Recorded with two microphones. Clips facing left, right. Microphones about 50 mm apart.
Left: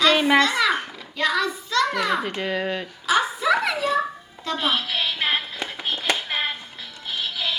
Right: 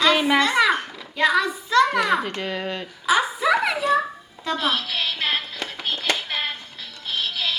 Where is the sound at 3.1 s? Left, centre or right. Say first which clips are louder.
Right 1 dB; centre.